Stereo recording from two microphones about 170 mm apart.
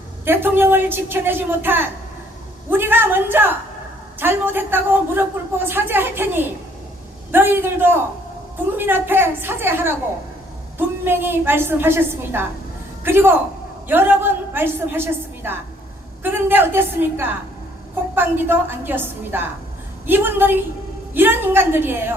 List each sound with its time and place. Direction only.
0.3 s a man's voice: 10° right (ahead or behind)